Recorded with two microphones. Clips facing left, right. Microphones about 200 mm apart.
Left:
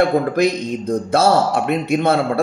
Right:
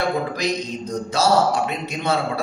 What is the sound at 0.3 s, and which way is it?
Speech, 55° left (ahead or behind).